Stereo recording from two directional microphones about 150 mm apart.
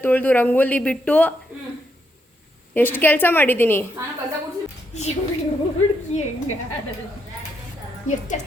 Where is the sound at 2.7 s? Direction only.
15° left (ahead or behind).